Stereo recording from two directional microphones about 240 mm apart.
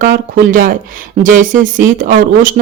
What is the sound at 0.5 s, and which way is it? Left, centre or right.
A woman's voice, right.